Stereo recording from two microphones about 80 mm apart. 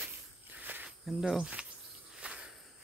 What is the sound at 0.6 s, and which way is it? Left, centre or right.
Cricket, right.